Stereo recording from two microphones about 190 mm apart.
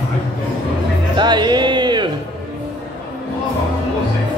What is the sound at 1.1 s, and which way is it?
Music, 25° right (ahead or behind).